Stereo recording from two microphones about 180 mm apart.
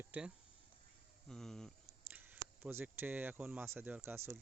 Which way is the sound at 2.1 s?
10° right (ahead or behind).